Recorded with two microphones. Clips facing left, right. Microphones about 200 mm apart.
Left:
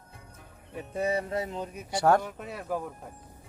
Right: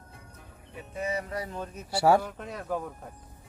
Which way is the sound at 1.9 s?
10° right (ahead or behind).